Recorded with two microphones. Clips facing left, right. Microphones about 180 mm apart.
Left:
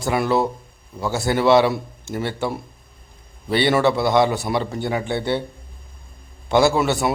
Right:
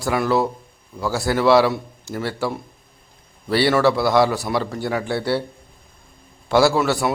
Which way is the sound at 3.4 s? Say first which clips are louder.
Right 1 dB; 5° right (ahead or behind).